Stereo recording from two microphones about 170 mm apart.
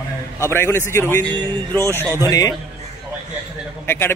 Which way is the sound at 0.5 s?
15° left (ahead or behind).